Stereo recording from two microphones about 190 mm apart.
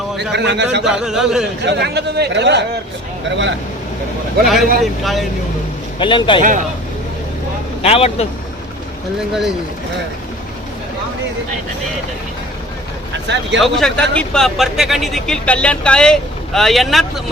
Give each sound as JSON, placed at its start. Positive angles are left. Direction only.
{"t": 0.3, "sound": "a man's voice", "side_deg": -65}
{"t": 0.9, "sound": "speech", "side_deg": -5}
{"t": 1.6, "sound": "a man's voice", "side_deg": -60}
{"t": 4.8, "sound": "speech", "side_deg": 0}
{"t": 6.0, "sound": "a man's voice", "side_deg": 25}
{"t": 6.4, "sound": "speech", "side_deg": -45}
{"t": 7.8, "sound": "speech", "side_deg": 30}
{"t": 13.2, "sound": "speech", "side_deg": -65}
{"t": 13.6, "sound": "speech", "side_deg": 0}